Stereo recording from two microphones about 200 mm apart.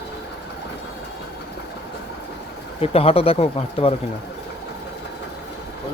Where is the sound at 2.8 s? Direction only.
30° left (ahead or behind).